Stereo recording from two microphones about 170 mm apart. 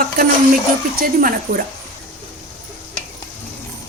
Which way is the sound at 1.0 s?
55° right (ahead or behind).